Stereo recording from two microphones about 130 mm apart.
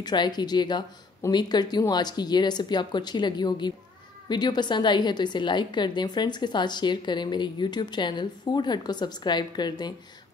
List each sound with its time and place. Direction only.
0.0 s a woman's voice: 35° left (ahead or behind)